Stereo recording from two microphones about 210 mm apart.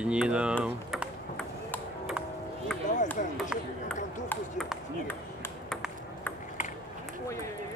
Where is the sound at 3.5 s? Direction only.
5° right (ahead or behind).